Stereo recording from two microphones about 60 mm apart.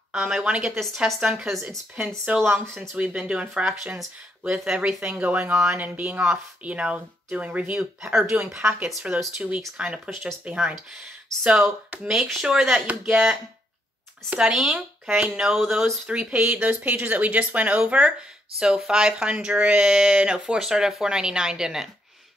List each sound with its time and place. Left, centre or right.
0.1 s a woman's voice: centre
1.5 s speech: centre
2.3 s speech: right
8.1 s speech: centre
9.1 s speech: right
14.4 s speech: centre
16.1 s speech: right